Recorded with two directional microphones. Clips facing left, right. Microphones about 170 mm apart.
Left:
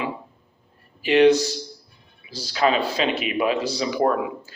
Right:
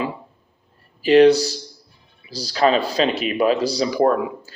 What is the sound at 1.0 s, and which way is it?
A man's voice, 40° right (ahead or behind).